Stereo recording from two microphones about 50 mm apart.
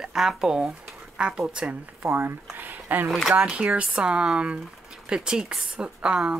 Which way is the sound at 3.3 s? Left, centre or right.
Right.